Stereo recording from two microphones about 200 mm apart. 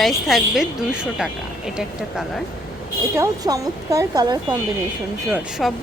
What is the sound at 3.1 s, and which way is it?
Speech, 15° right (ahead or behind).